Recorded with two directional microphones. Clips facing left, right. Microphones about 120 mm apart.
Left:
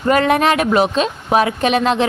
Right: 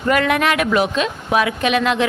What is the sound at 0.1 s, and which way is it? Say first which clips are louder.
A woman's voice: left 3 dB; 30° left (ahead or behind).